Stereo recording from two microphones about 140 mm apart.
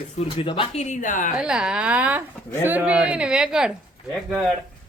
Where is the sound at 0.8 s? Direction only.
70° left (ahead or behind).